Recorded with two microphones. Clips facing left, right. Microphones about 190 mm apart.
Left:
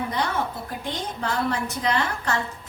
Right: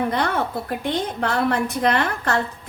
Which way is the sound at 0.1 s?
60° right (ahead or behind).